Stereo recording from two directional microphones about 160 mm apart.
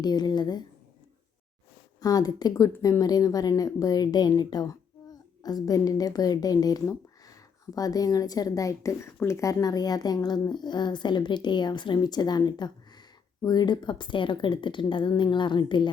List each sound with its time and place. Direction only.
0.0 s speech: 25° left (ahead or behind)
2.0 s speech: 25° left (ahead or behind)